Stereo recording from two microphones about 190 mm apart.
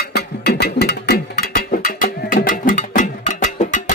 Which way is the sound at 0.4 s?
55° left (ahead or behind).